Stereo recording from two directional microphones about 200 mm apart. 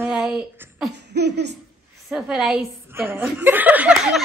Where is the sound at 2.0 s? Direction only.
5° right (ahead or behind).